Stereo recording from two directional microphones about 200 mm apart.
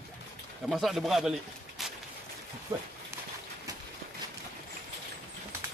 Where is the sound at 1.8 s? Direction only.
Centre (ahead or behind).